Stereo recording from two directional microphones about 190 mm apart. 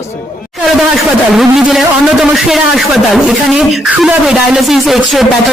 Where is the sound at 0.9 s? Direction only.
Centre (ahead or behind).